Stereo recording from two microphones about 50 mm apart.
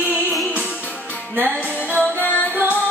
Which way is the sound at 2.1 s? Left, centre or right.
Left.